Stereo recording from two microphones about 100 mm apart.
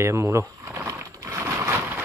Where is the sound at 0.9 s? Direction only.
30° right (ahead or behind).